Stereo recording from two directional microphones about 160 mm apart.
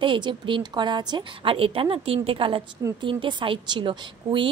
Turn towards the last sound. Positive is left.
turn(degrees=-30)  # may be behind; listen again after turning